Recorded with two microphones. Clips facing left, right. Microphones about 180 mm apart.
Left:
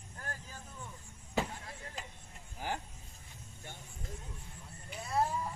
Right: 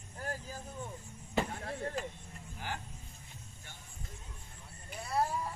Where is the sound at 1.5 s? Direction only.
65° right (ahead or behind).